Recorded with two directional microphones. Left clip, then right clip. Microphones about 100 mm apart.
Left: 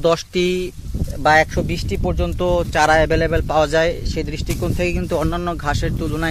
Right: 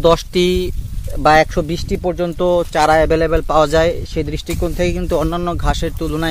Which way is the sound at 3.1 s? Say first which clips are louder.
Right 3 dB; 40° right (ahead or behind).